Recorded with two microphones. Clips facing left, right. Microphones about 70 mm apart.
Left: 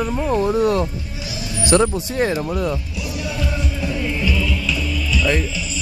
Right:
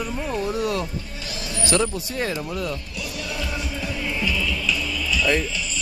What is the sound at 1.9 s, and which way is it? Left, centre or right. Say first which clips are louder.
Speech: left 6 dB; left.